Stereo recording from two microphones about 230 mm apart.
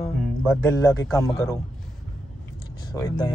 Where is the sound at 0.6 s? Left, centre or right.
Centre.